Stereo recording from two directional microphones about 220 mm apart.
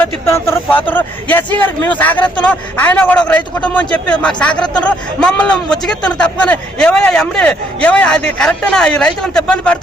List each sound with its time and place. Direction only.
0.3 s a man's voice: 10° left (ahead or behind)